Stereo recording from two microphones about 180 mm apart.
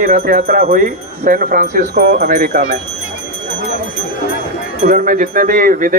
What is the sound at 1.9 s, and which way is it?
Speech, 60° right (ahead or behind).